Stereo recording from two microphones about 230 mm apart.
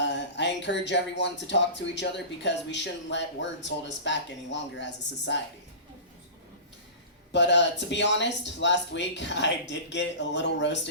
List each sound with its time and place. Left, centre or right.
0.0 s speech: left
7.3 s speech: left